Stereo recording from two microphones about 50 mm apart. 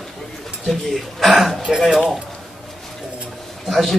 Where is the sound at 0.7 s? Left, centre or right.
Centre.